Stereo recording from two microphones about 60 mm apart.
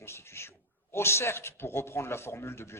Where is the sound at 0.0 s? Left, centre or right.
Left.